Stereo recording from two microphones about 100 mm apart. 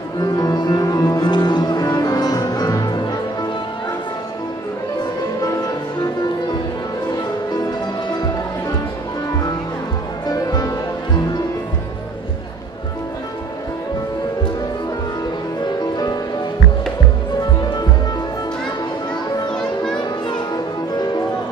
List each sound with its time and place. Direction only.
0.2 s music: 40° left (ahead or behind)
5.4 s music: 40° left (ahead or behind)
7.5 s music: 45° left (ahead or behind)
10.2 s music: 40° left (ahead or behind)
15.6 s music: 45° left (ahead or behind)
17.4 s music: 40° left (ahead or behind)
20.0 s music: 45° left (ahead or behind)